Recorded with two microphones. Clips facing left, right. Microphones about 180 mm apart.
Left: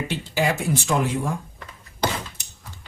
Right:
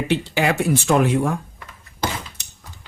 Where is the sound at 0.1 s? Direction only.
65° right (ahead or behind).